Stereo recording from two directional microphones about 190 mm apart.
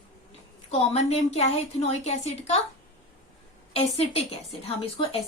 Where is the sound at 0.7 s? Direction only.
35° left (ahead or behind).